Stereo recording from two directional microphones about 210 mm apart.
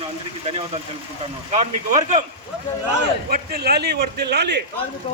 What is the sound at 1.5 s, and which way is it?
Speech, 30° right (ahead or behind).